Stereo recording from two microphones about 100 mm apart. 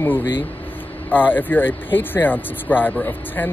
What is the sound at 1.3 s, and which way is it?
Speech, 20° left (ahead or behind).